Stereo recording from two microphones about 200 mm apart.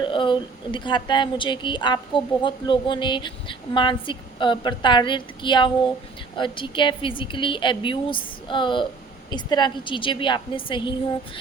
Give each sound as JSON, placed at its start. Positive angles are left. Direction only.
{"t": 0.0, "sound": "a woman's voice", "side_deg": 25}